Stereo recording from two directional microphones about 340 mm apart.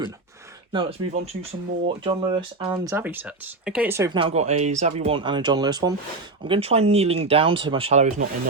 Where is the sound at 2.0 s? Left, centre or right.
Centre.